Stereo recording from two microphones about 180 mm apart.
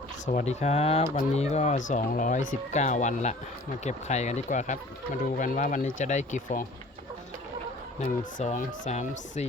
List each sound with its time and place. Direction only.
0.3 s speech: 40° left (ahead or behind)
7.9 s speech: 45° left (ahead or behind)